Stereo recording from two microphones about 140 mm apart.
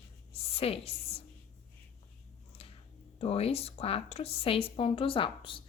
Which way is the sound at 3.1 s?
45° left (ahead or behind).